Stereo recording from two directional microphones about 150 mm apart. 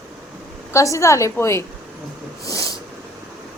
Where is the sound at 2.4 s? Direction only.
20° left (ahead or behind).